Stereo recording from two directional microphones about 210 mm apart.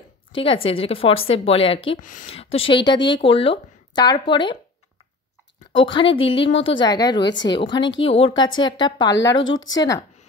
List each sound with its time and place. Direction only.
0.3 s a woman's voice: 25° left (ahead or behind)
5.7 s a woman's voice: 25° left (ahead or behind)
7.2 s a woman's voice: 55° left (ahead or behind)
7.5 s a woman's voice: 20° left (ahead or behind)